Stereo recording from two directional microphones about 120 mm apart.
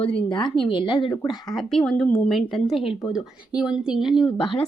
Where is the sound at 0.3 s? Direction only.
40° left (ahead or behind).